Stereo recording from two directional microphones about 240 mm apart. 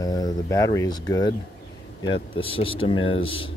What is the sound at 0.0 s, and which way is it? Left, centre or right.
Speech, centre.